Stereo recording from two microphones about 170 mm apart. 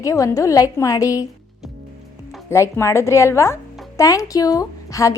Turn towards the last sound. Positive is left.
turn(degrees=20)  # may be behind; listen again after turning